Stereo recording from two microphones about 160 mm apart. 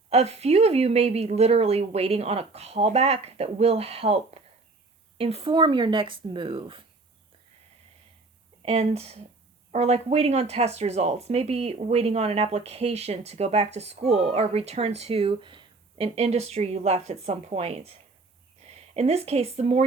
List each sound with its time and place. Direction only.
0.1 s speech: 40° right (ahead or behind)
8.6 s speech: 40° right (ahead or behind)